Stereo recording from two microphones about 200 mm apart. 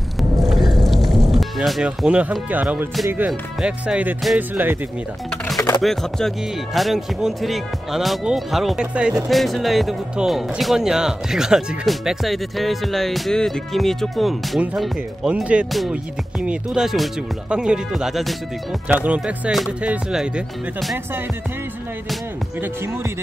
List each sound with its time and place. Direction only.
0.2 s music: centre (ahead or behind)
0.6 s whale vocalization: 20° right (ahead or behind)
1.3 s speech: centre (ahead or behind)
5.8 s speech: centre (ahead or behind)